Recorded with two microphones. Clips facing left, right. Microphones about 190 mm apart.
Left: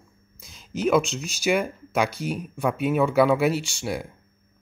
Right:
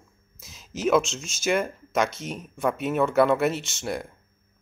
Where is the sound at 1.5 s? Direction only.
Centre (ahead or behind).